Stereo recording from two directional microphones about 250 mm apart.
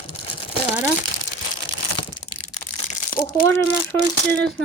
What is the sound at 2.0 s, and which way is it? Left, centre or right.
Crushing, left.